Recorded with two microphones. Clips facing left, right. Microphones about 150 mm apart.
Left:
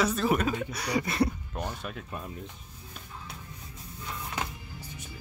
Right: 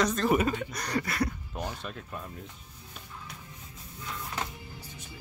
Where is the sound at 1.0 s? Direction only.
25° left (ahead or behind).